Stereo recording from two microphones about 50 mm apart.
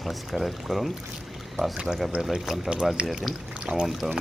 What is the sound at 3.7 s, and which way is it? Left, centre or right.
Speech, right.